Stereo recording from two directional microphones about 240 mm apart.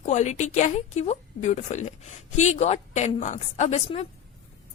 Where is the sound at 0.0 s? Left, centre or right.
Left.